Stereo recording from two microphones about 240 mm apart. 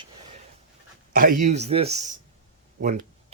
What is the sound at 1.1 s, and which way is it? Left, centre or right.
Speech, right.